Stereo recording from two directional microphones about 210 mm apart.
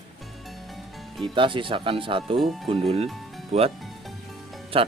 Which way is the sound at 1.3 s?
25° right (ahead or behind).